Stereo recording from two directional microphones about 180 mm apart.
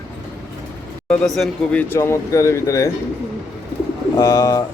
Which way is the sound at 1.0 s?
5° left (ahead or behind).